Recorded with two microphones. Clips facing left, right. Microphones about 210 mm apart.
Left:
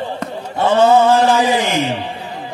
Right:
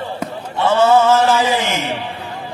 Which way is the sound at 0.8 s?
15° left (ahead or behind).